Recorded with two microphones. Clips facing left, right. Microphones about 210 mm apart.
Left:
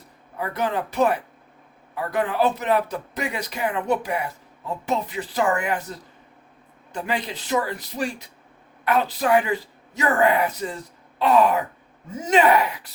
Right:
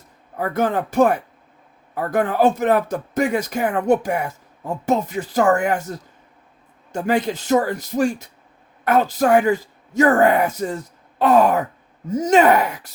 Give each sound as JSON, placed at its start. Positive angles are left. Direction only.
{"t": 0.3, "sound": "speech", "side_deg": -45}